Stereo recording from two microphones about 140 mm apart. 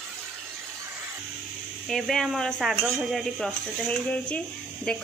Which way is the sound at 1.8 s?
Centre (ahead or behind).